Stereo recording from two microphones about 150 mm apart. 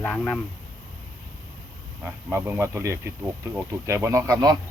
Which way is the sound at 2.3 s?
15° right (ahead or behind).